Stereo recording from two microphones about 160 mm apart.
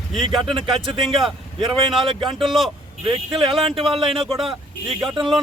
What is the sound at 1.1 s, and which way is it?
A man's voice, centre (ahead or behind).